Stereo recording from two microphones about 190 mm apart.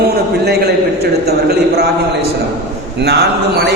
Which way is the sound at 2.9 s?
60° right (ahead or behind).